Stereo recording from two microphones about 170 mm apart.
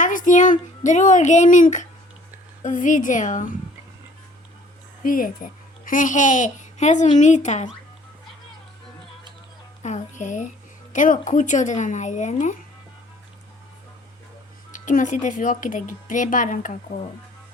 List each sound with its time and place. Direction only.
0.0 s music: 50° left (ahead or behind)
0.9 s speech: 45° left (ahead or behind)
5.0 s a child's voice: 55° left (ahead or behind)
9.8 s speech: 45° left (ahead or behind)
14.7 s speech: 50° left (ahead or behind)